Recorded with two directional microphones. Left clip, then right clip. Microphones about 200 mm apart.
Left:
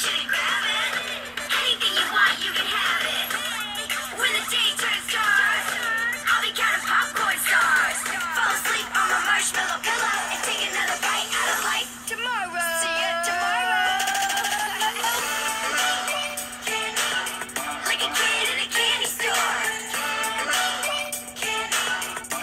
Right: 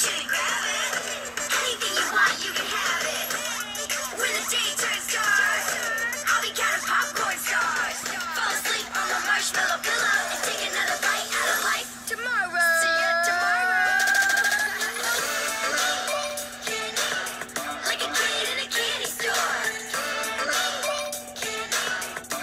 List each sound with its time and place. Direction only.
0.0 s music: 30° right (ahead or behind)
7.4 s music: 5° right (ahead or behind)
9.6 s music: 25° right (ahead or behind)
12.5 s a sound: 20° right (ahead or behind)
17.8 s music: 20° right (ahead or behind)